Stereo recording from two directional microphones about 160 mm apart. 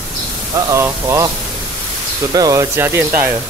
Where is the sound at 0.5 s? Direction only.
15° right (ahead or behind).